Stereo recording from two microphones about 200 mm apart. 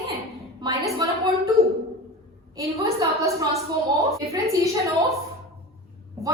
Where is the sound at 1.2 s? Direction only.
15° right (ahead or behind).